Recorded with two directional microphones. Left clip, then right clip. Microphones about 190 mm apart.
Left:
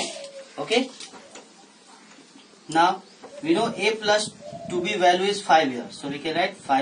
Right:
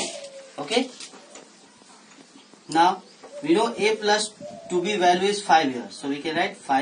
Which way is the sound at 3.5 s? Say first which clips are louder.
Right 1 dB; 10° left (ahead or behind).